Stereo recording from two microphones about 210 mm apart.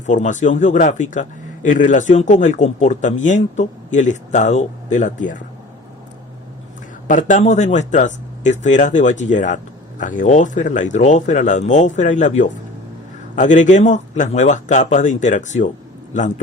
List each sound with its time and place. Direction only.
0.0 s a man's voice: 35° left (ahead or behind)
7.1 s a man's voice: 35° left (ahead or behind)